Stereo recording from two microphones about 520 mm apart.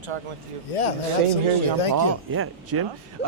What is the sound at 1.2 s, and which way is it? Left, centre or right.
Speech, left.